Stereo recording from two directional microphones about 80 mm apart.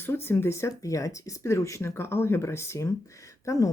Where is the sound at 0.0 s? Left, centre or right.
Left.